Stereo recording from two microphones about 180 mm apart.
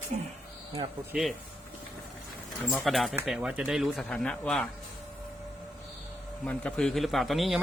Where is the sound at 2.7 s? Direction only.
Centre (ahead or behind).